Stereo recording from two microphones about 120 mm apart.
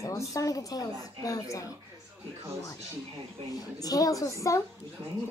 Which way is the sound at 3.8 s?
30° left (ahead or behind).